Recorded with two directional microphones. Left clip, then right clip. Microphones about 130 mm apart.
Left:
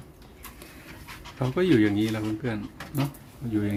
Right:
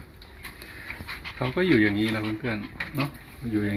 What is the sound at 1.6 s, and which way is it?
Speech, 30° left (ahead or behind).